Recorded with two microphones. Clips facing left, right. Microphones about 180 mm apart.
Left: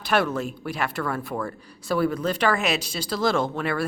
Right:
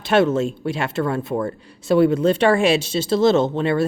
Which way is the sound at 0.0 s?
25° right (ahead or behind).